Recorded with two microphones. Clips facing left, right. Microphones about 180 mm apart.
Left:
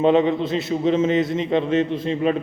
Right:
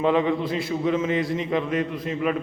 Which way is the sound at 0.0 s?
25° left (ahead or behind).